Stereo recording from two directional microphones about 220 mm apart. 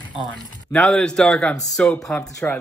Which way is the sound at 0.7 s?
5° left (ahead or behind).